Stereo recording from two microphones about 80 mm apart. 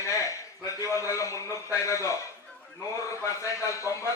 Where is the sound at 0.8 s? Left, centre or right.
Left.